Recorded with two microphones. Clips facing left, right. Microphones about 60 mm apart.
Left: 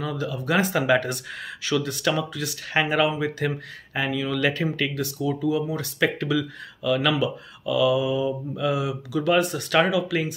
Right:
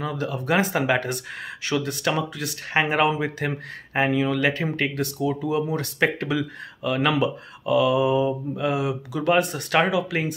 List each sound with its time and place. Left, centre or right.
0.0 s speech: right
0.6 s speech: right
4.7 s speech: right